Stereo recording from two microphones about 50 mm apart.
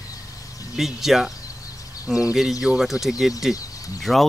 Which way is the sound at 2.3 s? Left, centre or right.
Centre.